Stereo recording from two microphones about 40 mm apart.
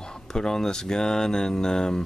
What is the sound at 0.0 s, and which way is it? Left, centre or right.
Speech, centre.